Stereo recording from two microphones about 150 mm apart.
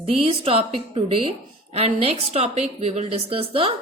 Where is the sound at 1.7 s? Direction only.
40° right (ahead or behind).